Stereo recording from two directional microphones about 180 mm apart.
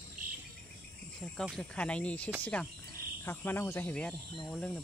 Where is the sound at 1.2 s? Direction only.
5° left (ahead or behind).